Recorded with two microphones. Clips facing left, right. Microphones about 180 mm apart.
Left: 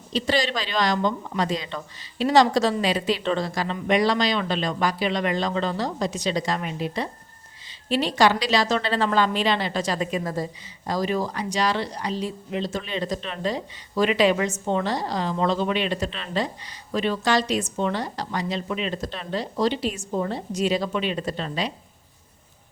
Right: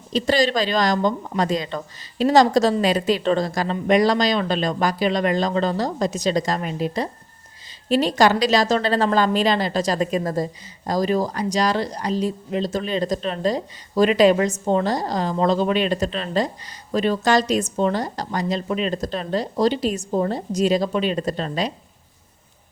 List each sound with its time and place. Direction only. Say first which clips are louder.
0.1 s a woman's voice: right 5 dB; 45° right (ahead or behind)